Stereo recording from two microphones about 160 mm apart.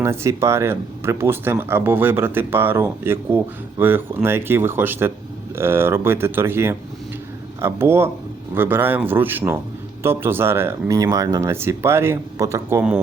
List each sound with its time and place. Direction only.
0.0 s speech: 15° right (ahead or behind)